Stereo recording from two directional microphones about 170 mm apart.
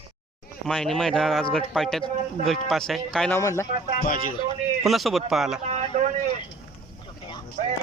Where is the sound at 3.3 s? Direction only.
15° left (ahead or behind).